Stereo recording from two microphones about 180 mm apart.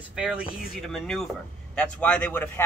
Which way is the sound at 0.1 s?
5° right (ahead or behind).